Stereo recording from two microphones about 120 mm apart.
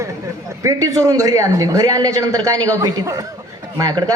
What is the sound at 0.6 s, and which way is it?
A man's voice, 30° right (ahead or behind).